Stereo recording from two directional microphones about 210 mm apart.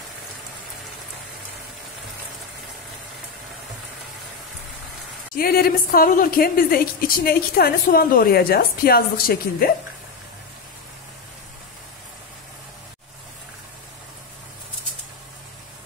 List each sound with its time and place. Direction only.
5.3 s a woman's voice: 45° left (ahead or behind)